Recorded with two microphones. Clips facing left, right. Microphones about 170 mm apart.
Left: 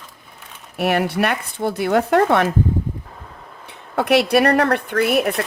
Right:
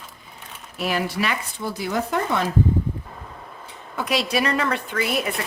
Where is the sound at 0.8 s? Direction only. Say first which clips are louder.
Left 6 dB; 60° left (ahead or behind).